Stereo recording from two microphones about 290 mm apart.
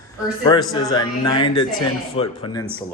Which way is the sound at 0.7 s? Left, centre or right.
Centre.